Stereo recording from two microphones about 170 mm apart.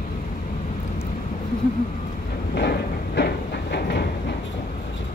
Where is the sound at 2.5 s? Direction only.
75° left (ahead or behind).